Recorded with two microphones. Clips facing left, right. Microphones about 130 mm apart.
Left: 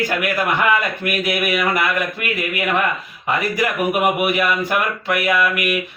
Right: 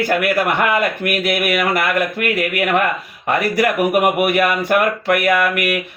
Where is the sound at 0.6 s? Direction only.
55° right (ahead or behind).